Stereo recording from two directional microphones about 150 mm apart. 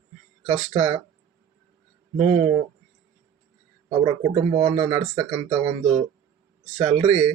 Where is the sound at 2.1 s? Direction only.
45° right (ahead or behind).